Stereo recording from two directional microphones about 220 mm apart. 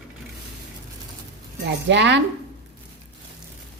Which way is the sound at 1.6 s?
55° right (ahead or behind).